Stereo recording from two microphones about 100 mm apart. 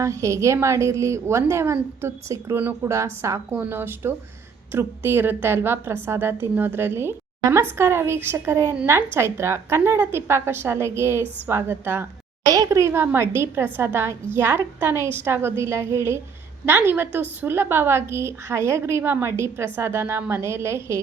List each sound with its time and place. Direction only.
0.0 s a woman's voice: 30° right (ahead or behind)
2.9 s a woman's voice: 30° right (ahead or behind)
12.5 s a woman's voice: 35° right (ahead or behind)